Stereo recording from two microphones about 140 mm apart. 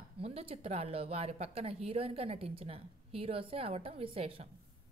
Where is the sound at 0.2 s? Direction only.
45° right (ahead or behind).